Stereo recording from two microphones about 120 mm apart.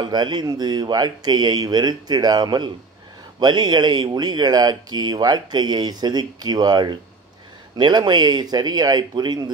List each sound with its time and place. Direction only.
0.0 s speech: 40° right (ahead or behind)